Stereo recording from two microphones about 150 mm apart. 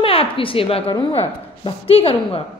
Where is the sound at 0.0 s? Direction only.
40° left (ahead or behind).